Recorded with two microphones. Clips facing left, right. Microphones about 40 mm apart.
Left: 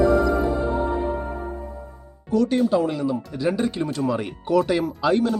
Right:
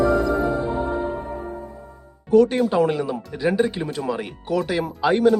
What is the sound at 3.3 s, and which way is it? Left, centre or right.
Speech, centre.